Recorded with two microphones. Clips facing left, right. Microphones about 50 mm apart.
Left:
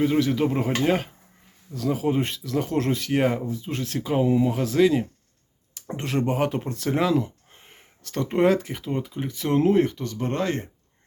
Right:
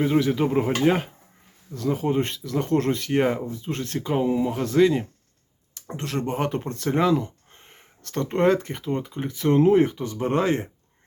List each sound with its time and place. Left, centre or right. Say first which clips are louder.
0.0 s speech: even; centre
5.7 s speech: left 2 dB; centre
6.3 s speech: left 1 dB; centre; by 10.7 s right